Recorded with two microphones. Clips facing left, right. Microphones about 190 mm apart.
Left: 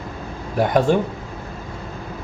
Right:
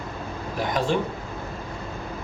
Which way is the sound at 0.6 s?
50° left (ahead or behind).